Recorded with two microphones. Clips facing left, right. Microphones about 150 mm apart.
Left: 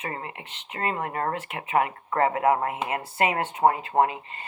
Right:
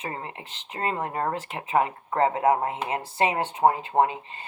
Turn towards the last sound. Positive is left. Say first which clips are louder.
# even
turn(degrees=-25)  # may be behind; listen again after turning